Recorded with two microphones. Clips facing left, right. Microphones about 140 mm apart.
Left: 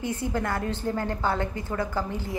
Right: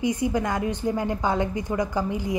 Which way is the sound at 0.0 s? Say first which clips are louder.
Right 4 dB; 15° right (ahead or behind).